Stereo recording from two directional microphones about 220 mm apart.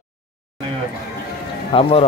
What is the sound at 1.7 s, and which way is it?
Speech, 20° left (ahead or behind).